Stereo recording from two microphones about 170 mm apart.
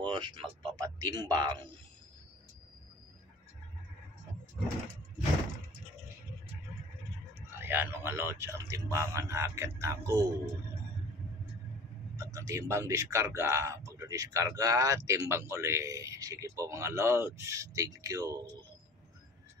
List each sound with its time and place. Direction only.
0.1 s speech: 25° right (ahead or behind)
7.3 s speech: 10° right (ahead or behind)
12.2 s speech: 15° right (ahead or behind)